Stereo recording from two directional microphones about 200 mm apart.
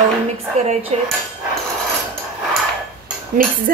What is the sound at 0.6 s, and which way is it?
Speech, 35° right (ahead or behind).